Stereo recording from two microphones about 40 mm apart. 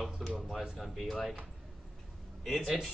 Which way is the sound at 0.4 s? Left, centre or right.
Centre.